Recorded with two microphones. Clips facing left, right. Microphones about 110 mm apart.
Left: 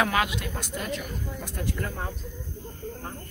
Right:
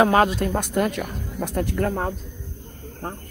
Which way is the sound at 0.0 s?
40° right (ahead or behind).